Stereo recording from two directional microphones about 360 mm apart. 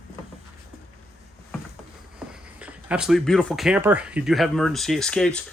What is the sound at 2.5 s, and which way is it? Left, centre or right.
Speech, centre.